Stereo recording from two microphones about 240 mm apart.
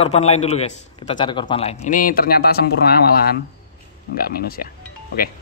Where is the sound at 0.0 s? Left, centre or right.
Left.